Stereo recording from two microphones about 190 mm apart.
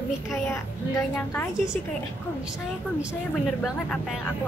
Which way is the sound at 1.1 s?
10° left (ahead or behind).